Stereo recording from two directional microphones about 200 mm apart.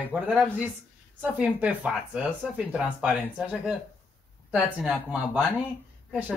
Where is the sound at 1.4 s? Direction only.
5° right (ahead or behind).